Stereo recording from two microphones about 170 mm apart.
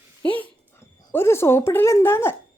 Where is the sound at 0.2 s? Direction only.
10° left (ahead or behind).